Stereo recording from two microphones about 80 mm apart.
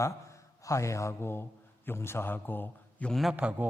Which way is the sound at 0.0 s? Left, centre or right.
Left.